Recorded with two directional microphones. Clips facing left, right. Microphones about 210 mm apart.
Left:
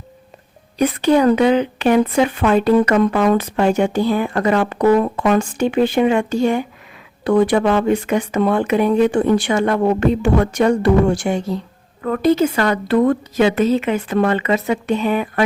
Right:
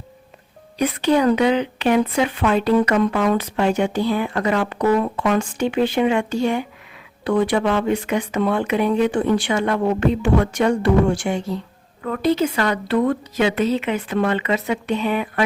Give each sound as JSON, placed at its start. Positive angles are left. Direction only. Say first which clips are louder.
{"t": 0.8, "sound": "speech", "louder": "left 3 dB", "side_deg": 45}